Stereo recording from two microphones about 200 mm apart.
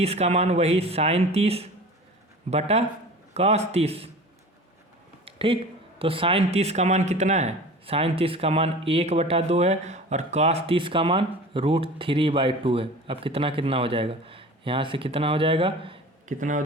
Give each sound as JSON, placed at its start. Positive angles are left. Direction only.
{"t": 0.0, "sound": "speech", "side_deg": -30}
{"t": 5.2, "sound": "a sound", "side_deg": -25}
{"t": 6.0, "sound": "speech", "side_deg": -25}
{"t": 16.4, "sound": "speech", "side_deg": -40}